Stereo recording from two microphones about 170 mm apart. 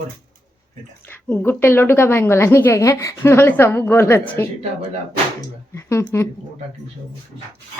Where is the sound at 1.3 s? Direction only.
15° left (ahead or behind).